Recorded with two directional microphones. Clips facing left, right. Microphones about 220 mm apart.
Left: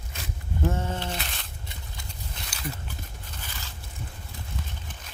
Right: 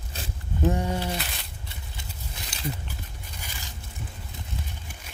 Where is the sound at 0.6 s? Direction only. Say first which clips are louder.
Right 3 dB; 15° right (ahead or behind).